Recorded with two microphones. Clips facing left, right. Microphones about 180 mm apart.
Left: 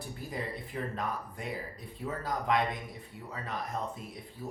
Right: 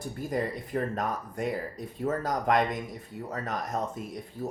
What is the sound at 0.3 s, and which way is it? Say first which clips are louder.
Speech: right 8 dB; 45° right (ahead or behind).